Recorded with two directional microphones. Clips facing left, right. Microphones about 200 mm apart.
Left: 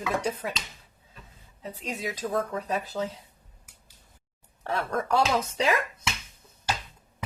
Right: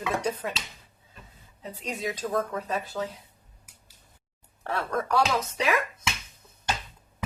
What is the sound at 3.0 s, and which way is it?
Speech, 15° left (ahead or behind).